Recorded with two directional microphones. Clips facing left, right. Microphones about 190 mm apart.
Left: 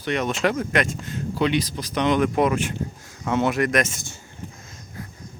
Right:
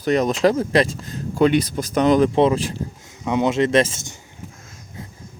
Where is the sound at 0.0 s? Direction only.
40° right (ahead or behind).